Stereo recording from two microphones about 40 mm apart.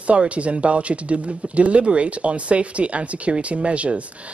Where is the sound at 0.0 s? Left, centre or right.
Right.